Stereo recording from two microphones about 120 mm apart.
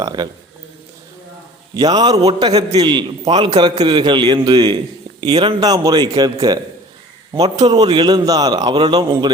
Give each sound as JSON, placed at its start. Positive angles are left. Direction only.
{"t": 0.0, "sound": "a man's voice", "side_deg": -35}
{"t": 1.7, "sound": "a man's voice", "side_deg": -35}